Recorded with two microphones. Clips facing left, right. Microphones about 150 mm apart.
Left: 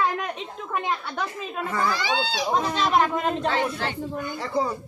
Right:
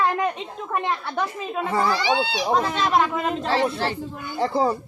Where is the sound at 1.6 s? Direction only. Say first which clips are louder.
Right 4 dB; 30° right (ahead or behind).